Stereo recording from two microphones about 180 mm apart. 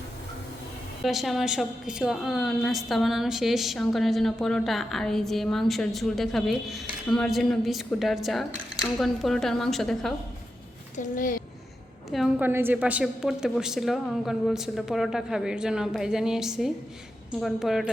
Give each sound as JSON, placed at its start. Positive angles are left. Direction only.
{"t": 1.0, "sound": "a woman's voice", "side_deg": 0}
{"t": 10.9, "sound": "speech", "side_deg": 45}
{"t": 12.1, "sound": "a woman's voice", "side_deg": 0}
{"t": 12.5, "sound": "a woman's voice", "side_deg": -10}